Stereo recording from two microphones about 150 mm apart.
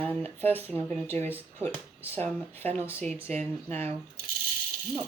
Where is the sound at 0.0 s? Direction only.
10° left (ahead or behind).